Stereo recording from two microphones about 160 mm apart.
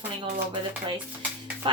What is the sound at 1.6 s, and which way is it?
Speech, 35° right (ahead or behind).